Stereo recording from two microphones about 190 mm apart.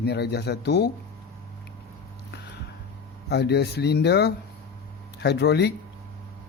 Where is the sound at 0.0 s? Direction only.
60° left (ahead or behind).